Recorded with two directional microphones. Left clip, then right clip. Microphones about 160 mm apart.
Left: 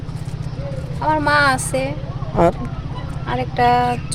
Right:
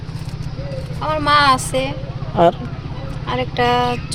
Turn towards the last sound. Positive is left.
turn(degrees=15)  # may be behind; listen again after turning